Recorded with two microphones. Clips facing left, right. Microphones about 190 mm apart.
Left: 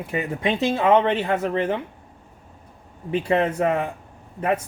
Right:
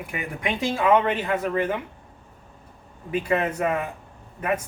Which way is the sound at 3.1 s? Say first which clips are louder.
Left 3 dB; 30° left (ahead or behind).